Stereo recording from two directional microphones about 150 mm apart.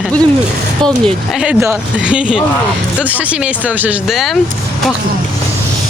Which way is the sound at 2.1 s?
5° right (ahead or behind).